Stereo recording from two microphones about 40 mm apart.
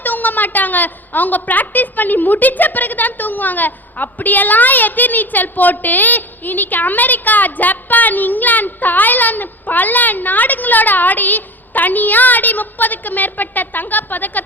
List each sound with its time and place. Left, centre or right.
0.0 s a woman's voice: left